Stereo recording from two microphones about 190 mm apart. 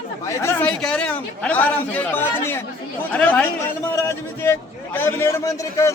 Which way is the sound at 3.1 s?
10° left (ahead or behind).